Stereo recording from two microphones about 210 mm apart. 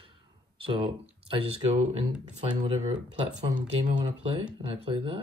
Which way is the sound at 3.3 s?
25° right (ahead or behind).